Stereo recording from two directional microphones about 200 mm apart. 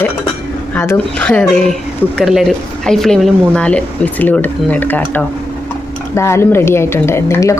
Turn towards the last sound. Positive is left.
turn(degrees=15)  # may be behind; listen again after turning